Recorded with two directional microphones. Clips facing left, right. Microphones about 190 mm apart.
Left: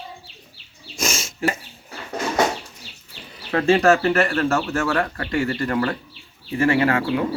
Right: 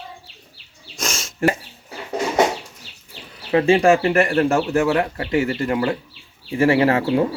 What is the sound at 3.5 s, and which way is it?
Speech, 15° right (ahead or behind).